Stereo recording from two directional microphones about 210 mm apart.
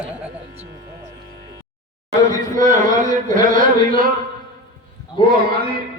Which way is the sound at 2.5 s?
35° right (ahead or behind).